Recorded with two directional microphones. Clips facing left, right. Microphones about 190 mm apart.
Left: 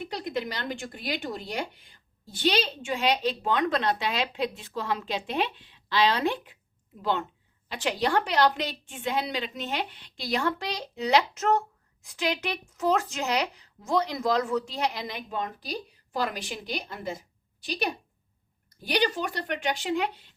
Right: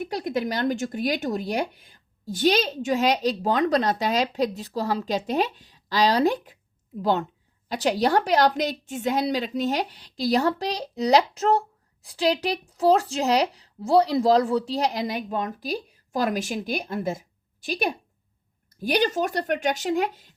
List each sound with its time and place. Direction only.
0.1 s a woman's voice: 45° right (ahead or behind)